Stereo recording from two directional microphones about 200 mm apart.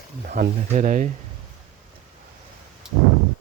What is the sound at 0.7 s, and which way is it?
Speech, 40° right (ahead or behind).